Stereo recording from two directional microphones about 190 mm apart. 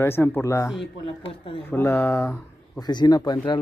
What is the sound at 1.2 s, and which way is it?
Speech, 30° left (ahead or behind).